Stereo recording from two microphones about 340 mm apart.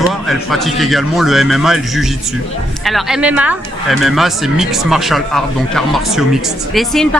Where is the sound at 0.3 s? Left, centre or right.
Centre.